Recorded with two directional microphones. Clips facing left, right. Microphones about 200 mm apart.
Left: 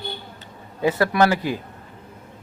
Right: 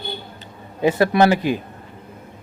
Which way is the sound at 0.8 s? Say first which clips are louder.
Right 3 dB; 20° right (ahead or behind).